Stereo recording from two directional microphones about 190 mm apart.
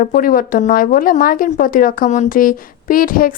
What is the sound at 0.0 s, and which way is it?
Speech, 45° left (ahead or behind).